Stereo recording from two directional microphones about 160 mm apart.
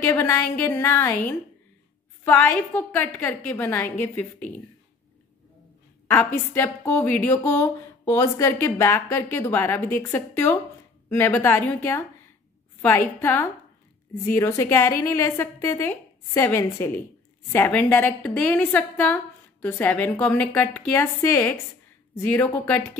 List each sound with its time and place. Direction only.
0.0 s a woman's voice: 15° left (ahead or behind)
6.0 s a woman's voice: 15° left (ahead or behind)